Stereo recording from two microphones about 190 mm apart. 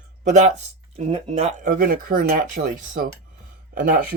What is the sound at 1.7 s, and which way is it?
Speech, 50° right (ahead or behind).